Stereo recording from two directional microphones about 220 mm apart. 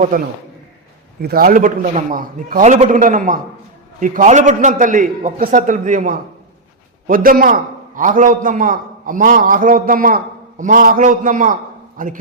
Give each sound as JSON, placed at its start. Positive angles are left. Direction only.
{"t": 0.1, "sound": "a man's voice", "side_deg": -40}